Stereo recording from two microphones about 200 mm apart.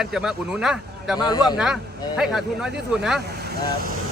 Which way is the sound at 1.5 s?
Centre (ahead or behind).